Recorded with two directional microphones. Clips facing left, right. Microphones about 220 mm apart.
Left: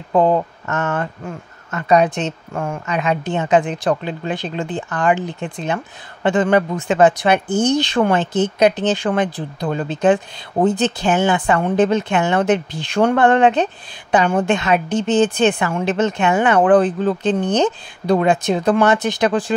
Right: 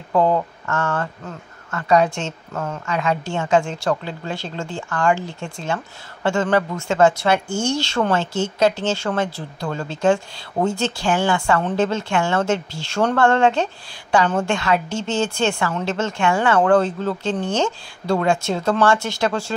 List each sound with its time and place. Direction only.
0.1 s speech: 20° left (ahead or behind)